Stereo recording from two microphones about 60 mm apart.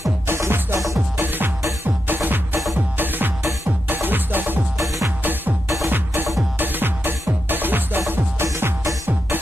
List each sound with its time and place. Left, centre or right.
0.3 s music: right
0.7 s music: right
2.0 s music: right
5.9 s music: right